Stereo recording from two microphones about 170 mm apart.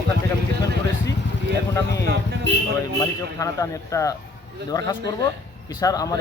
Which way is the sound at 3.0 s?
20° left (ahead or behind).